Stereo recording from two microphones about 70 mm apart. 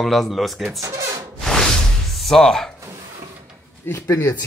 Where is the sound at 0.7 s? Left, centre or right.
Right.